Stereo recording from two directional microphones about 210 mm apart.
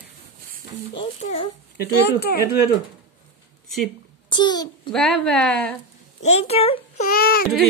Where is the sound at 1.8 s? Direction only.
50° left (ahead or behind).